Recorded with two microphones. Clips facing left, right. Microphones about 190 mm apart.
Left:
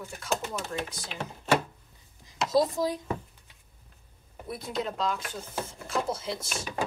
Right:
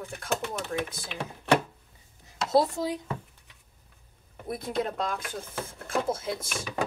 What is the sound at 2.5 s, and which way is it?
Speech, 65° right (ahead or behind).